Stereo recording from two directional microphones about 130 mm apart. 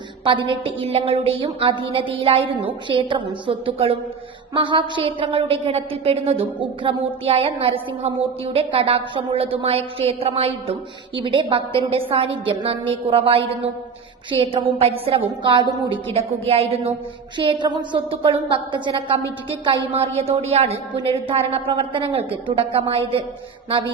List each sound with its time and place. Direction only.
0.3 s a woman's voice: 40° right (ahead or behind)
17.3 s a woman's voice: 35° right (ahead or behind)
23.6 s music: 45° right (ahead or behind)